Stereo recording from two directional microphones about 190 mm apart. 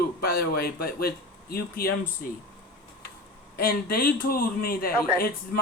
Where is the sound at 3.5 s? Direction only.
55° left (ahead or behind).